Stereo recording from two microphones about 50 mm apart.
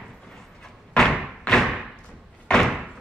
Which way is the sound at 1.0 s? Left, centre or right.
Centre.